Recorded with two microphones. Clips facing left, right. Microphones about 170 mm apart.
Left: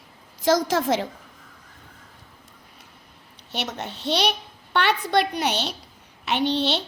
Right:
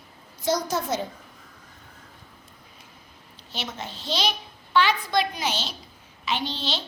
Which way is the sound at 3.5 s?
65° left (ahead or behind).